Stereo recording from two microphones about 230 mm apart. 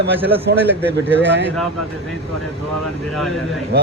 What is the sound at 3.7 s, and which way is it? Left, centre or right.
Speech, right.